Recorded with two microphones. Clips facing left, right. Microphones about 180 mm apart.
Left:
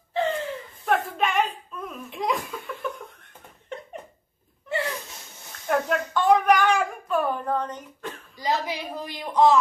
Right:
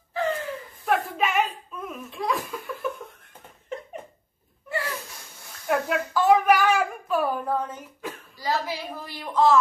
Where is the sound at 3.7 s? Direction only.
Centre (ahead or behind).